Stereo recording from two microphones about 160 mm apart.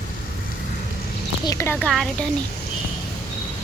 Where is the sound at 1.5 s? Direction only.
15° left (ahead or behind).